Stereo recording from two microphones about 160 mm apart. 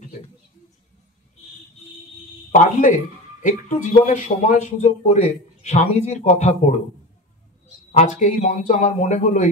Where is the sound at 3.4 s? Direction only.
50° left (ahead or behind).